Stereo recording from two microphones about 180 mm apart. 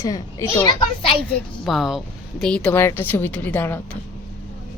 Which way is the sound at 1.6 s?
Centre (ahead or behind).